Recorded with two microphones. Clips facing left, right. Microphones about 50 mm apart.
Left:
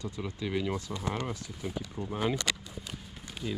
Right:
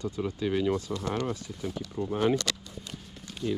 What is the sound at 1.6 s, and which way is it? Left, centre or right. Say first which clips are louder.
Run: right 3 dB; centre.